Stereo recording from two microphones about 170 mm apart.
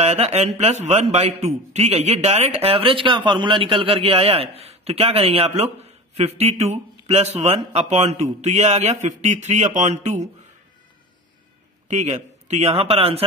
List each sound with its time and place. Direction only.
0.0 s a man's voice: 40° right (ahead or behind)
11.9 s a man's voice: 40° right (ahead or behind)